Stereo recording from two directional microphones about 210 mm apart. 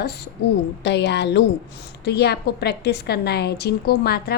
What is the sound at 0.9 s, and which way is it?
A woman's voice, 55° left (ahead or behind).